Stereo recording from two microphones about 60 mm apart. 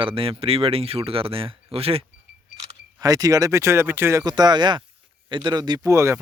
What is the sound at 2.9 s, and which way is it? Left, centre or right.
Speech, right.